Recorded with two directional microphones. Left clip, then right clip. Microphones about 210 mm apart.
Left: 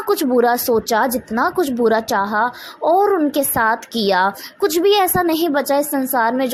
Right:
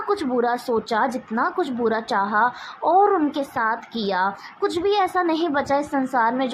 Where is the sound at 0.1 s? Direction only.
40° left (ahead or behind).